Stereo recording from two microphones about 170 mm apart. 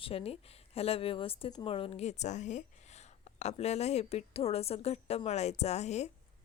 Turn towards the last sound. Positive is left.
turn(degrees=40)  # may be behind; listen again after turning